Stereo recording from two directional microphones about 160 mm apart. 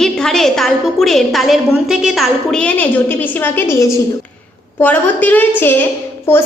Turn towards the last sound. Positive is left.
turn(degrees=15)  # may be behind; listen again after turning